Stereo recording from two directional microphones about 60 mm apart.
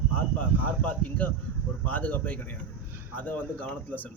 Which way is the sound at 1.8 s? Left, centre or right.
Left.